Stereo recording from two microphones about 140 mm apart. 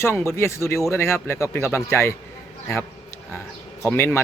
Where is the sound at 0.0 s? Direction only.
20° left (ahead or behind).